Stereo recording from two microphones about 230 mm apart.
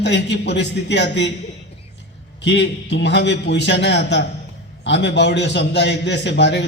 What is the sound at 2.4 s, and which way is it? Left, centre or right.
A man's voice, left.